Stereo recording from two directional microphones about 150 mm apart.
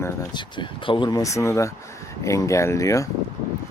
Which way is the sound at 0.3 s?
30° left (ahead or behind).